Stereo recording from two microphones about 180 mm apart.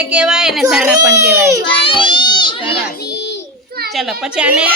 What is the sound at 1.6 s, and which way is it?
A child's voice, 30° left (ahead or behind).